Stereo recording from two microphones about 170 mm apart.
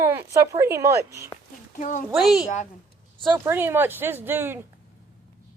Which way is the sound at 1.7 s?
50° left (ahead or behind).